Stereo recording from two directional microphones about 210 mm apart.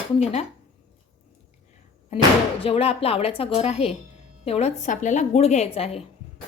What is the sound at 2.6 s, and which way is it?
A woman's voice, 30° left (ahead or behind).